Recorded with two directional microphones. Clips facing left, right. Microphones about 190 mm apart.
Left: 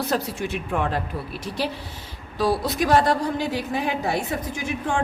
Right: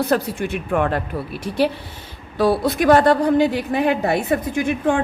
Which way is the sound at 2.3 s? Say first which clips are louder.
Right 5 dB; 55° right (ahead or behind).